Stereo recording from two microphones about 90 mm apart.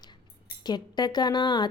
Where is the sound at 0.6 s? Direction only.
50° left (ahead or behind).